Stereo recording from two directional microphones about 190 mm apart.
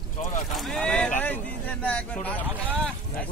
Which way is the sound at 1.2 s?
10° left (ahead or behind).